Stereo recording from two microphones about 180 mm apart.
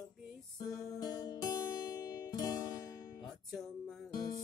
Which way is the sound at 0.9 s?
20° left (ahead or behind).